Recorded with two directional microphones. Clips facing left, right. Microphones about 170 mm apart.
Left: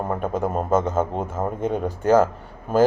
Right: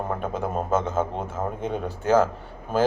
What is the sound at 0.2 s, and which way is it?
Speech, 10° left (ahead or behind).